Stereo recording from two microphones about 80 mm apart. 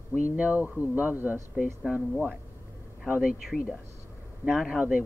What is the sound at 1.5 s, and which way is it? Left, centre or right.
Speech, centre.